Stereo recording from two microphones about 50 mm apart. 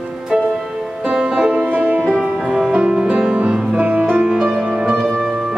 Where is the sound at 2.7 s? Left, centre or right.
Centre.